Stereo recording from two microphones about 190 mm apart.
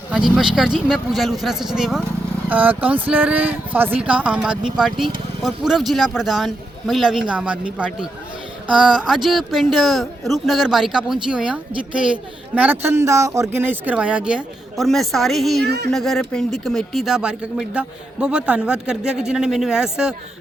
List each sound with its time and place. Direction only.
0.1 s speech: 5° right (ahead or behind)
15.6 s speech: 60° right (ahead or behind)
15.9 s speech: centre (ahead or behind)